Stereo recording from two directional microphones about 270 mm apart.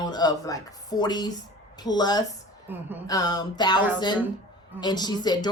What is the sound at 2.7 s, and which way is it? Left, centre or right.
Speech, centre.